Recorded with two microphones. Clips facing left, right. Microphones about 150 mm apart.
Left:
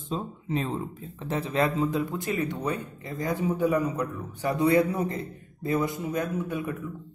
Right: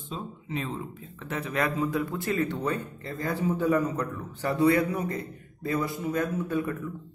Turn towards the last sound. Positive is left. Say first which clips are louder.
# right 2 dB
turn(degrees=15)  # may be behind; listen again after turning